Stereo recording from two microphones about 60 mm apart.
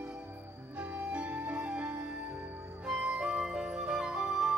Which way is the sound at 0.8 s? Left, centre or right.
Right.